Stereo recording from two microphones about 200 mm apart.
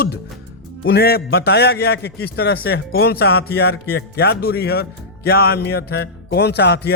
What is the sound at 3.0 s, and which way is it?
A man's voice, 50° left (ahead or behind).